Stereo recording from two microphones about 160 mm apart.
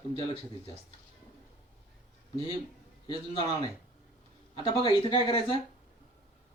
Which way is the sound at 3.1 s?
30° left (ahead or behind).